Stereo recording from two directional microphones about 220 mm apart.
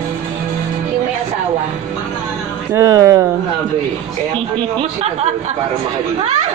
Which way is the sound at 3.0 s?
15° right (ahead or behind).